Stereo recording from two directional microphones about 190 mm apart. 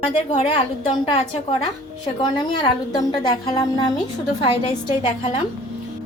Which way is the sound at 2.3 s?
20° left (ahead or behind).